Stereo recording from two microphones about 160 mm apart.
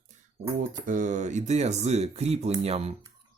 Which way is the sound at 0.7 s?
55° right (ahead or behind).